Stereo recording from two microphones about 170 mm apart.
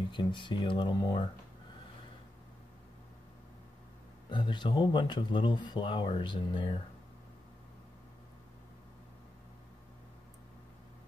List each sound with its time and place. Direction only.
0.1 s speech: 30° left (ahead or behind)
4.3 s speech: 25° left (ahead or behind)